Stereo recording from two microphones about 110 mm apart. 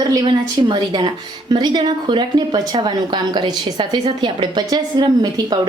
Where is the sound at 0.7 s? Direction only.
40° right (ahead or behind).